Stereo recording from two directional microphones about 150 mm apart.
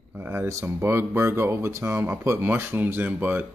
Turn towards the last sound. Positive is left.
turn(degrees=-15)  # may be behind; listen again after turning